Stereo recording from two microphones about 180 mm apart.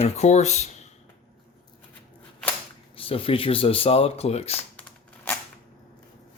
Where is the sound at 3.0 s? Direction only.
30° left (ahead or behind).